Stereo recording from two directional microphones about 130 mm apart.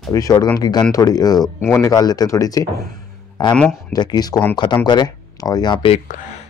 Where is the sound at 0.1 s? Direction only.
30° left (ahead or behind).